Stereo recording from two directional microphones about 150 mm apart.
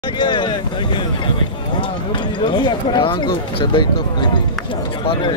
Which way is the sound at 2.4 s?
30° left (ahead or behind).